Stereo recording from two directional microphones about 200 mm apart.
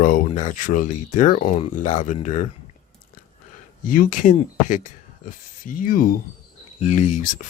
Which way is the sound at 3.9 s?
40° left (ahead or behind).